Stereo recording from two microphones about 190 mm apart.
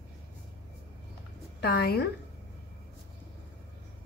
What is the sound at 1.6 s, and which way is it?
Speech, 55° left (ahead or behind).